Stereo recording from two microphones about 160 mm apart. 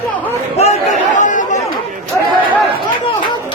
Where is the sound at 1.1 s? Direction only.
50° left (ahead or behind).